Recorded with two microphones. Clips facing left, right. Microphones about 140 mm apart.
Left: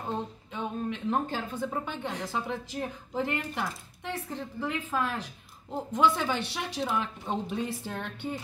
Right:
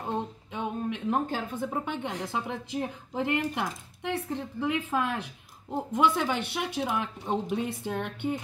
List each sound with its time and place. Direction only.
0.1 s a woman's voice: 15° right (ahead or behind)